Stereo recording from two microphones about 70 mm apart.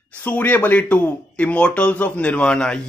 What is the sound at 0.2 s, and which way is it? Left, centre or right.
Speech, left.